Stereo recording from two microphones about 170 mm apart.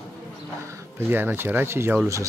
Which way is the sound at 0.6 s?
15° right (ahead or behind).